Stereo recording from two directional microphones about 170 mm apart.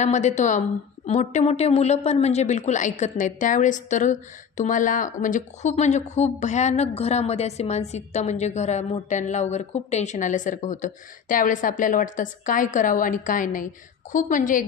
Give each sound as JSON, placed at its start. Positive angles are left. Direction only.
{"t": 0.0, "sound": "a woman's voice", "side_deg": 45}